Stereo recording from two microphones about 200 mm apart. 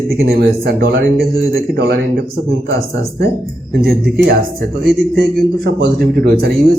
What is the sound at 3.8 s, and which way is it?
Speech, 50° right (ahead or behind).